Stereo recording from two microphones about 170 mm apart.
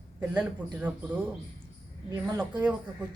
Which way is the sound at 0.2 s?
10° right (ahead or behind).